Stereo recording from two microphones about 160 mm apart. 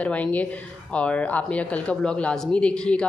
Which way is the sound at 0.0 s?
10° left (ahead or behind).